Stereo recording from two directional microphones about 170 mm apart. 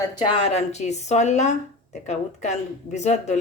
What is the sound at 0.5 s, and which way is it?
Speech, 40° left (ahead or behind).